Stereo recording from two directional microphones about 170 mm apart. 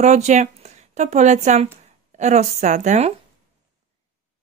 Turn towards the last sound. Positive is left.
turn(degrees=-40)  # may be behind; listen again after turning